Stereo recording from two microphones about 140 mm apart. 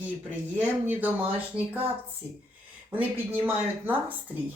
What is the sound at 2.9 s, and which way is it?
Speech, 10° right (ahead or behind).